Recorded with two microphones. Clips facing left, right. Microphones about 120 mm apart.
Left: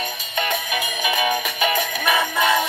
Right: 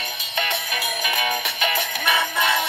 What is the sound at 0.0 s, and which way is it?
Music, 20° left (ahead or behind).